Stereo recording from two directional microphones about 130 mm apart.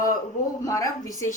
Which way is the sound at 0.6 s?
25° left (ahead or behind).